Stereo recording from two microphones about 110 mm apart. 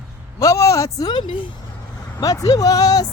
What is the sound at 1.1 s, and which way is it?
Speech, 45° left (ahead or behind).